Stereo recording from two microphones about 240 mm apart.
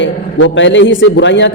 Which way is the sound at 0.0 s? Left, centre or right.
Left.